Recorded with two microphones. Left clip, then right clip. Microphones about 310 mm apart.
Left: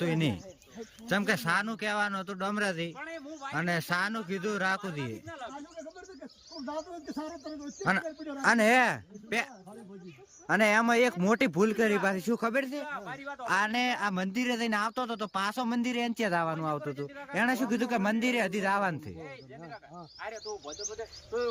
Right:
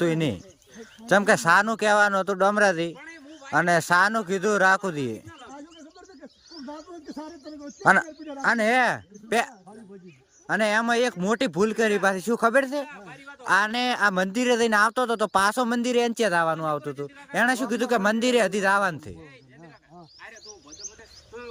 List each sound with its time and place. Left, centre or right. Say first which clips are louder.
0.0 s speech: right 6 dB; centre
7.1 s speech: even; centre
7.8 s speech: right 11 dB; centre
12.9 s a sound: left 4 dB; centre
13.4 s speech: right 6 dB; centre
20.2 s bird: left 7 dB; centre